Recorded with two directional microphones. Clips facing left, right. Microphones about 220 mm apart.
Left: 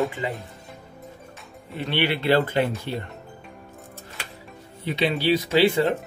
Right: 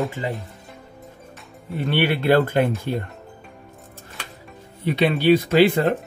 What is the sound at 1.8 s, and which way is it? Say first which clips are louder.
Speech: right 3 dB; 50° right (ahead or behind).